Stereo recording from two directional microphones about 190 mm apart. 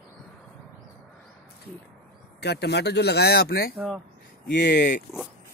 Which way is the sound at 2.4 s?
60° left (ahead or behind).